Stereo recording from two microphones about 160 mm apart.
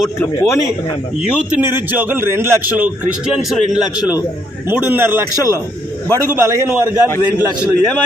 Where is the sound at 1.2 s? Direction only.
5° right (ahead or behind).